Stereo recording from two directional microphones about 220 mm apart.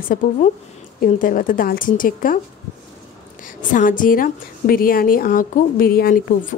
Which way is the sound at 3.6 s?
35° left (ahead or behind).